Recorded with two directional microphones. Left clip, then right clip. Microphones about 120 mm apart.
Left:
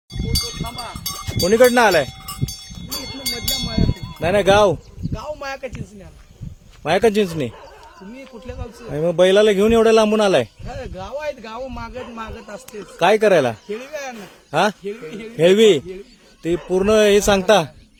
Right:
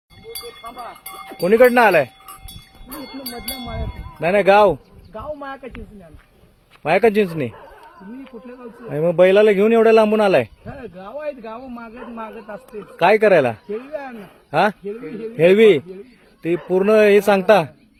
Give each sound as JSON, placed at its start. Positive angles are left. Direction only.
{"t": 1.4, "sound": "speech", "side_deg": 5}
{"t": 2.9, "sound": "a sound", "side_deg": 5}
{"t": 4.2, "sound": "a man's voice", "side_deg": 10}
{"t": 5.1, "sound": "a sound", "side_deg": 65}
{"t": 6.8, "sound": "a man's voice", "side_deg": 10}
{"t": 8.9, "sound": "a man's voice", "side_deg": 10}
{"t": 10.9, "sound": "a man's voice", "side_deg": 50}
{"t": 13.0, "sound": "a man's voice", "side_deg": 15}